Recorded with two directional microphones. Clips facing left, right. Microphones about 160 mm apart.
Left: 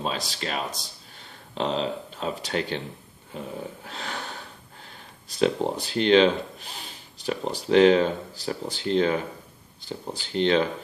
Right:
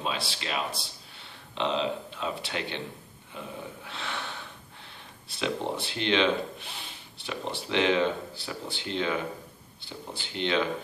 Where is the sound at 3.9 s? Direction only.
40° left (ahead or behind).